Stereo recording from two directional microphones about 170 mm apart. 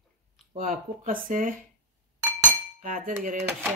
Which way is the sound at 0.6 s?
55° right (ahead or behind).